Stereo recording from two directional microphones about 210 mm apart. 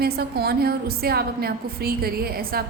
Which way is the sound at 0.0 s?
50° right (ahead or behind).